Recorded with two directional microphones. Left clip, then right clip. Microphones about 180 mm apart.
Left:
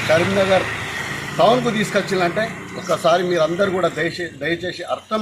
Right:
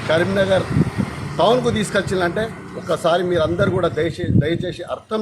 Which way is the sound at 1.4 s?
20° right (ahead or behind).